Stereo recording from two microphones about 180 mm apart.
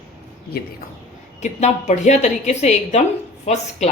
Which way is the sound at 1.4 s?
40° left (ahead or behind).